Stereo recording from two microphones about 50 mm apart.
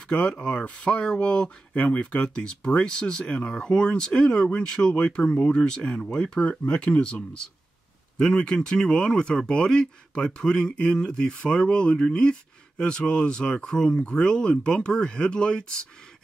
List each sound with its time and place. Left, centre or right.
0.1 s speech: left